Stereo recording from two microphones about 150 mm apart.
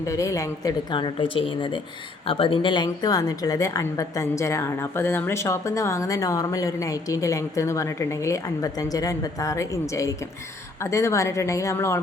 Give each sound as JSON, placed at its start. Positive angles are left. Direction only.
{"t": 0.0, "sound": "a woman's voice", "side_deg": 20}